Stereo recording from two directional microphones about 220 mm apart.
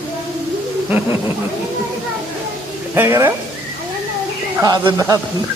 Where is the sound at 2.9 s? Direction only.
10° right (ahead or behind).